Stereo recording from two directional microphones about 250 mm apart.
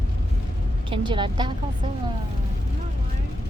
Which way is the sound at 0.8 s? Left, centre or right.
Centre.